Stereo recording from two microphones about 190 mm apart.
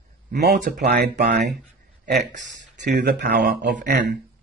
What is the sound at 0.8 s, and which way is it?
Speech, 55° right (ahead or behind).